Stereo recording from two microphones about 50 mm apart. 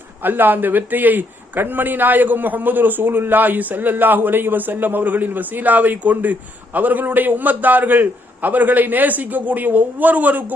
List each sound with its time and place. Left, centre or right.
0.2 s a man's voice: right